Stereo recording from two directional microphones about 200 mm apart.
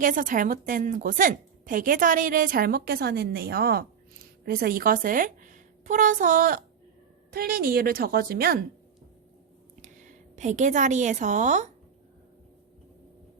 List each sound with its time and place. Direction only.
0.0 s a woman's voice: 40° right (ahead or behind)
9.8 s a woman's voice: 35° right (ahead or behind)